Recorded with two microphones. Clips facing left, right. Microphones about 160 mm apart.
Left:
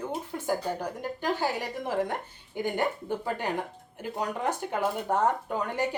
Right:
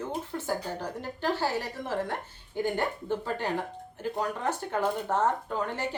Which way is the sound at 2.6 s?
15° left (ahead or behind).